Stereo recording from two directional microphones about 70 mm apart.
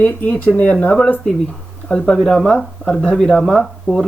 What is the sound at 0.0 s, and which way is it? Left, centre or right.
Speech, left.